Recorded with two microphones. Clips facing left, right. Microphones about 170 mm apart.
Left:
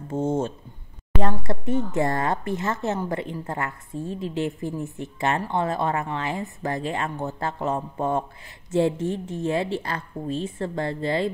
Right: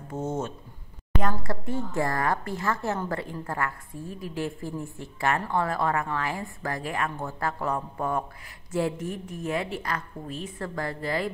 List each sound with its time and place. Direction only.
0.1 s speech: 30° left (ahead or behind)